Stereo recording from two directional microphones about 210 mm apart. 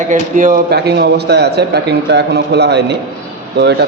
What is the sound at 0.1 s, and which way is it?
A man's voice, 35° right (ahead or behind).